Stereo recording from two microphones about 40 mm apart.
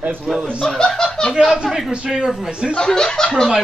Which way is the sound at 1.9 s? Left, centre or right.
Right.